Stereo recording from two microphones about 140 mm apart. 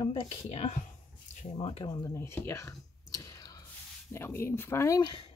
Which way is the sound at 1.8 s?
25° left (ahead or behind).